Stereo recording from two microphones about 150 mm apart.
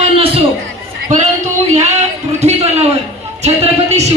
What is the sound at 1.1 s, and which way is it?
Speech, 50° right (ahead or behind).